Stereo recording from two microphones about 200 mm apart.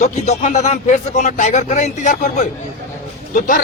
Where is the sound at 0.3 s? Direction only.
35° left (ahead or behind).